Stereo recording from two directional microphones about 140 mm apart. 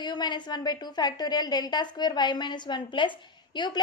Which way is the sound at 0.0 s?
30° left (ahead or behind).